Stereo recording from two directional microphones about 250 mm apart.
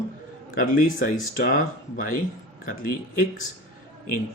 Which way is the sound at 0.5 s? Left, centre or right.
Left.